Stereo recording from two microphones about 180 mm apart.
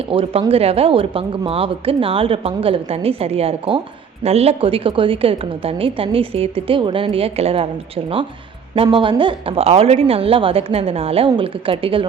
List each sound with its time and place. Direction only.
0.1 s speech: 30° right (ahead or behind)
8.7 s a woman's voice: 30° right (ahead or behind)